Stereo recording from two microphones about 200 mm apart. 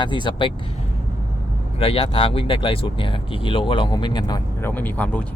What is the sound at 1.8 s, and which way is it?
Speech, 30° left (ahead or behind).